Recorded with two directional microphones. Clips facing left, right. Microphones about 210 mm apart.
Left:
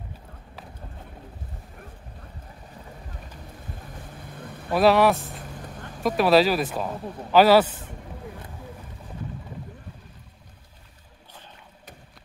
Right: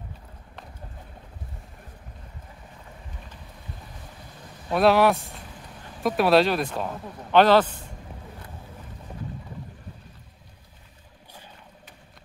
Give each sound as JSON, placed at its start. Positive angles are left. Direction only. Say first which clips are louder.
{"t": 4.6, "sound": "speech", "louder": "left 1 dB", "side_deg": 0}